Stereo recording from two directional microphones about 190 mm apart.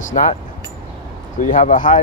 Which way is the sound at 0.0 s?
40° left (ahead or behind).